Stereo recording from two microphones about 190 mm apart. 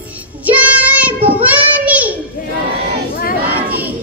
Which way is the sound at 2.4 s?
45° left (ahead or behind).